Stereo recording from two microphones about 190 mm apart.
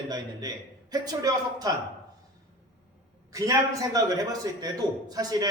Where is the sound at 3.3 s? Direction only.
15° right (ahead or behind).